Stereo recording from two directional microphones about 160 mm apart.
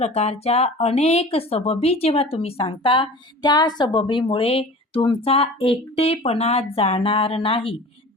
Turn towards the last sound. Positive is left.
turn(degrees=35)  # may be behind; listen again after turning